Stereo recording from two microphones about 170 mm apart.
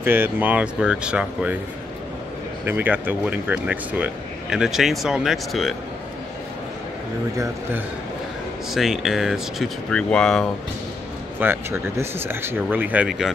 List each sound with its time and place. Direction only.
0.0 s speech: 10° right (ahead or behind)
2.6 s speech: 10° right (ahead or behind)
8.7 s speech: centre (ahead or behind)
11.3 s speech: 15° right (ahead or behind)